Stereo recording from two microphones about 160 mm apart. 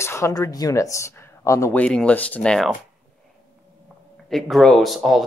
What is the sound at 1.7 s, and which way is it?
Rub, 5° left (ahead or behind).